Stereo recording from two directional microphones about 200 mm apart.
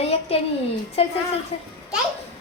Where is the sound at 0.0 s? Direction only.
30° left (ahead or behind).